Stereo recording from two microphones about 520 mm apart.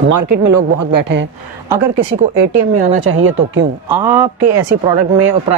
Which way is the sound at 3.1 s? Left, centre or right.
Right.